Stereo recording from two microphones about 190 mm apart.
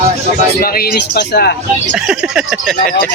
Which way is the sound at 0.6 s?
55° left (ahead or behind).